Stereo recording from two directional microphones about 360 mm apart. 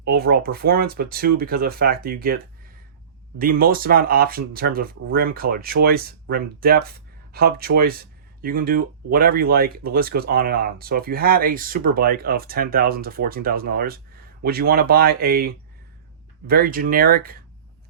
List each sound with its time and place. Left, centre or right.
0.0 s speech: right